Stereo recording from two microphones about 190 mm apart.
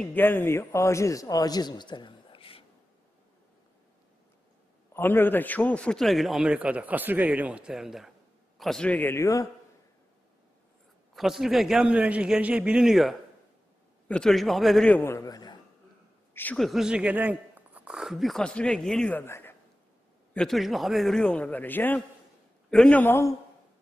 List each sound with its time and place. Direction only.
0.0 s a man's voice: 10° left (ahead or behind); by 2.6 s 30° left (ahead or behind)
4.9 s a man's voice: 10° left (ahead or behind)
11.1 s a man's voice: centre (ahead or behind); by 15.6 s 20° left (ahead or behind)
16.3 s speech: 5° left (ahead or behind)
20.3 s a man's voice: centre (ahead or behind)